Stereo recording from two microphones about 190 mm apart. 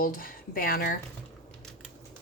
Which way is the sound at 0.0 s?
50° left (ahead or behind).